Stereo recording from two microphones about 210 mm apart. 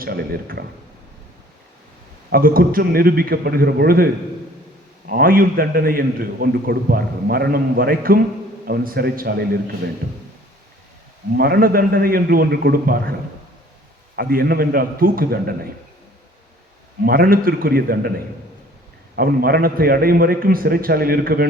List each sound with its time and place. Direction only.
0.0 s a man's voice: 45° right (ahead or behind)
2.3 s a man's voice: 45° right (ahead or behind)
11.3 s a man's voice: 45° right (ahead or behind)
14.2 s a man's voice: 45° right (ahead or behind)
17.0 s a man's voice: 45° right (ahead or behind)
19.1 s a man's voice: 45° right (ahead or behind)